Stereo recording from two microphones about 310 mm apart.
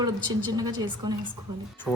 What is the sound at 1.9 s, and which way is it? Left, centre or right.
Speech, centre.